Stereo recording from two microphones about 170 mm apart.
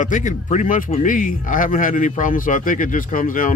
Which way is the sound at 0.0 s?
50° left (ahead or behind).